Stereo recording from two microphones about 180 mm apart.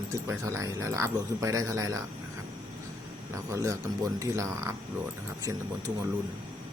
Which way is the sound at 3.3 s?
15° right (ahead or behind).